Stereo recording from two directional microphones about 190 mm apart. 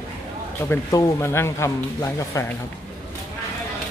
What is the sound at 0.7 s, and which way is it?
Speech, 15° left (ahead or behind).